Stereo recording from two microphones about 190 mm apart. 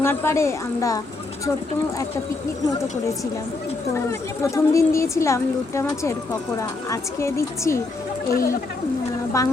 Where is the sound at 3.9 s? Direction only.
15° left (ahead or behind).